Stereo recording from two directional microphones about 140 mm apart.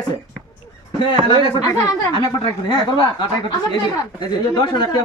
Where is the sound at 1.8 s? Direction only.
20° left (ahead or behind).